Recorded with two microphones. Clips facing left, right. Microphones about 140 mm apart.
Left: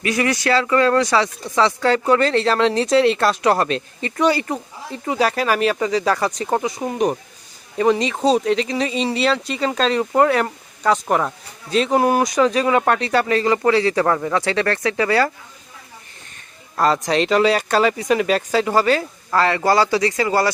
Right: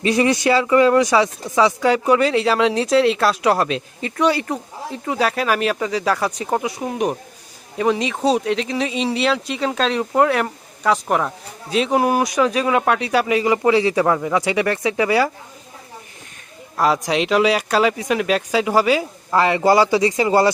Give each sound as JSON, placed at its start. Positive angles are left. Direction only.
{"t": 0.0, "sound": "speech", "side_deg": -25}
{"t": 16.7, "sound": "speech", "side_deg": -5}